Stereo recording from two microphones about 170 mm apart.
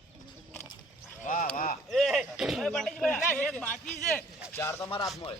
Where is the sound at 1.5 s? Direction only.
55° left (ahead or behind).